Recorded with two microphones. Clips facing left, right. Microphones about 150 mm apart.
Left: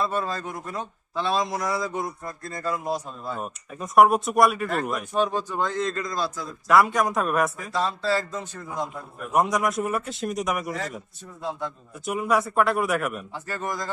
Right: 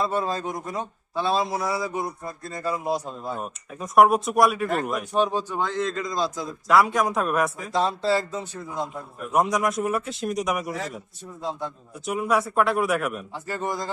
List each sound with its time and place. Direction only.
0.0 s a man's voice: 15° right (ahead or behind)
3.3 s speech: centre (ahead or behind)
5.1 s a man's voice: 15° right (ahead or behind)
6.7 s speech: centre (ahead or behind)
7.7 s a man's voice: 15° right (ahead or behind)
9.3 s speech: centre (ahead or behind)
12.0 s speech: centre (ahead or behind)
13.3 s a man's voice: 15° right (ahead or behind)